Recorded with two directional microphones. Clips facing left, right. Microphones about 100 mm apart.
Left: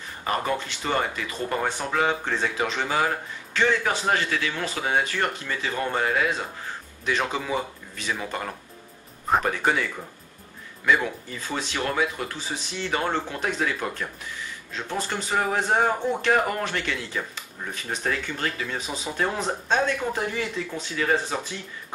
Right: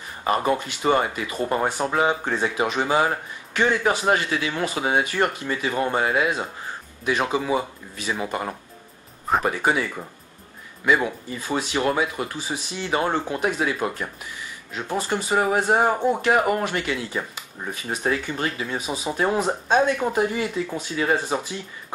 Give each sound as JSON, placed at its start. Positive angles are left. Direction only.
{"t": 0.2, "sound": "a man's voice", "side_deg": -20}
{"t": 10.9, "sound": "speech", "side_deg": -15}